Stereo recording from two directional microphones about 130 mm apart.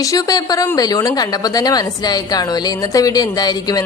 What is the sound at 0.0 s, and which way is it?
Speech, 25° left (ahead or behind).